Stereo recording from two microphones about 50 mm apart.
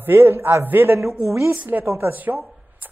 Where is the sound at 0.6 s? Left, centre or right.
Right.